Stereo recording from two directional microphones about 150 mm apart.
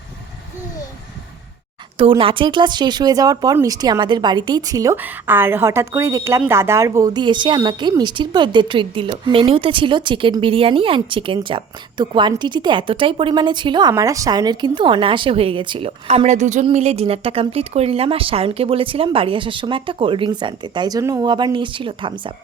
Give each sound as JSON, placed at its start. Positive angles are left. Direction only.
{"t": 2.0, "sound": "speech", "side_deg": -35}
{"t": 4.9, "sound": "a woman's voice", "side_deg": -15}